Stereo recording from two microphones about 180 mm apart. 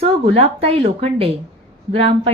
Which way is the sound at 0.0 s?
30° right (ahead or behind).